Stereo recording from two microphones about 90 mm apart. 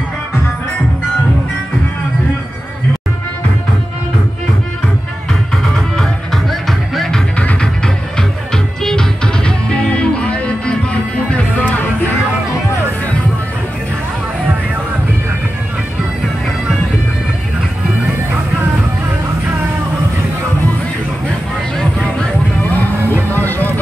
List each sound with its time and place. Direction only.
7.0 s music: 5° left (ahead or behind)
23.3 s music: 20° left (ahead or behind)